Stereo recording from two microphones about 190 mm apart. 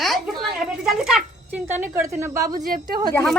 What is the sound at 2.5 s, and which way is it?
Speech, 50° right (ahead or behind).